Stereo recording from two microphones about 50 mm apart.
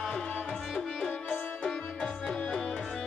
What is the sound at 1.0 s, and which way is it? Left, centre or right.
Music, centre.